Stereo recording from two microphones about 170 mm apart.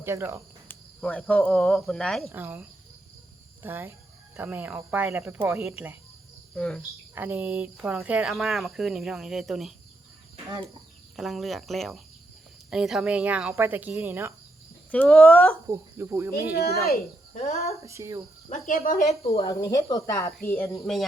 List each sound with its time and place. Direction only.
0.0 s speech: 15° right (ahead or behind)
0.7 s speech: 10° left (ahead or behind)
2.3 s speech: 10° right (ahead or behind)
6.6 s speech: 5° left (ahead or behind)
7.2 s speech: 10° right (ahead or behind)
11.2 s speech: centre (ahead or behind)
14.8 s speech: 5° left (ahead or behind)
15.7 s speech: 15° right (ahead or behind)
17.3 s speech: 40° left (ahead or behind)
17.8 s speech: 15° right (ahead or behind)
18.4 s speech: 45° left (ahead or behind)
19.5 s speech: 20° left (ahead or behind)
20.8 s speech: centre (ahead or behind)